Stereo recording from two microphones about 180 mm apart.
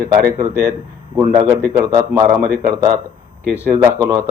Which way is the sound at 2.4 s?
55° right (ahead or behind).